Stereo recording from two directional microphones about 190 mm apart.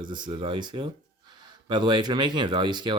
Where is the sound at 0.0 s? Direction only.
25° right (ahead or behind).